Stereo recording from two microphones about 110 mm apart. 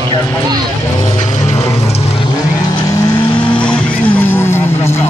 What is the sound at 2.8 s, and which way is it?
Vehicle, 25° left (ahead or behind).